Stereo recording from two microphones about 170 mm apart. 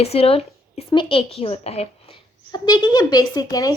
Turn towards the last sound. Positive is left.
turn(degrees=20)  # may be behind; listen again after turning